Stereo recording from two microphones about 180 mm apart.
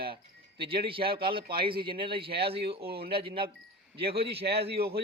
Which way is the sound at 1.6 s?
30° right (ahead or behind).